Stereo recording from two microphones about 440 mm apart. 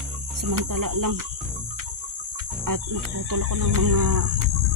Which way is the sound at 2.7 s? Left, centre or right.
Right.